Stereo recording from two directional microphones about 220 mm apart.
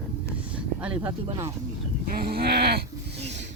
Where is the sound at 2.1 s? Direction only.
45° right (ahead or behind).